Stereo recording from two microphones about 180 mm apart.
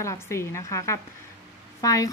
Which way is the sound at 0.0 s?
15° left (ahead or behind).